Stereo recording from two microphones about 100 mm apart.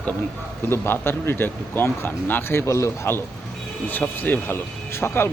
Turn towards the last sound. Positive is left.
turn(degrees=25)  # may be behind; listen again after turning